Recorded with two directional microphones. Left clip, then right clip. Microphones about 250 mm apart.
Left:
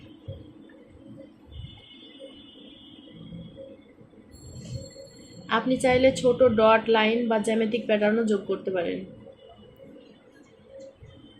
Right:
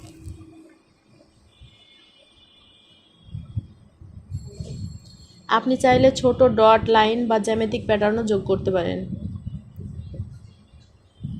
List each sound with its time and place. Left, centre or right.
5.5 s a woman's voice: right